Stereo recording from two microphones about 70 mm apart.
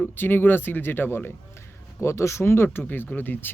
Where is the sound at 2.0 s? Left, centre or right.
Left.